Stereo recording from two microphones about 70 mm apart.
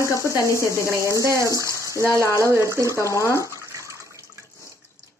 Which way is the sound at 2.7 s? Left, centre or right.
Right.